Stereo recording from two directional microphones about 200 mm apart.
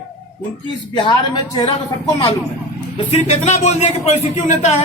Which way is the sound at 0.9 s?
25° left (ahead or behind).